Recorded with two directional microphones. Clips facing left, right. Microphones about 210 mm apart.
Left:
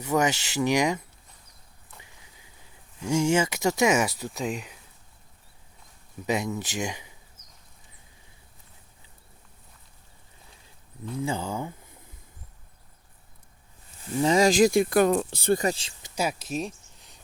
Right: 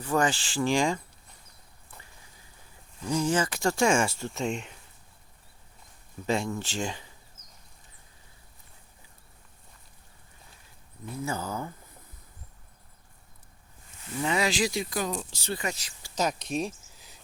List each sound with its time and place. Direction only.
0.2 s speech: 20° left (ahead or behind)
3.0 s speech: 20° left (ahead or behind)
4.2 s speech: centre (ahead or behind)
6.2 s speech: 15° left (ahead or behind)
11.2 s speech: 30° left (ahead or behind)
14.1 s speech: 35° left (ahead or behind); by 15.6 s 55° left (ahead or behind)
15.6 s speech: 30° left (ahead or behind)
16.1 s a sound: 5° left (ahead or behind)